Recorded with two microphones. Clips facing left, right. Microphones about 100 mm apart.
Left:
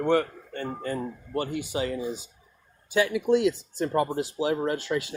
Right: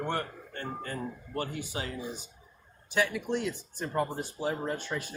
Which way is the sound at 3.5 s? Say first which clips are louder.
Left 7 dB; 85° left.